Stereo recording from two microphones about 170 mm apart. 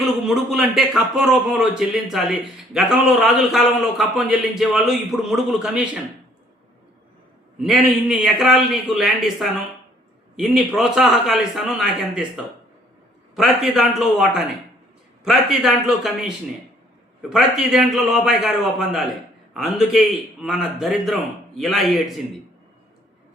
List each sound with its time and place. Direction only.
0.0 s a man's voice: centre (ahead or behind)
7.6 s a man's voice: centre (ahead or behind)
13.3 s a man's voice: centre (ahead or behind)